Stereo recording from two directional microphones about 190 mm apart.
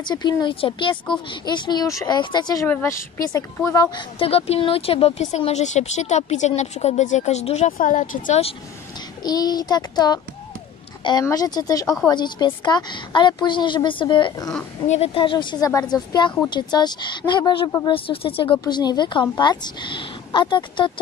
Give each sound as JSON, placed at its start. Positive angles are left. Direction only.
{"t": 0.0, "sound": "speech", "side_deg": 20}
{"t": 4.2, "sound": "speech", "side_deg": 30}
{"t": 8.3, "sound": "speech", "side_deg": 30}
{"t": 9.2, "sound": "speech", "side_deg": 20}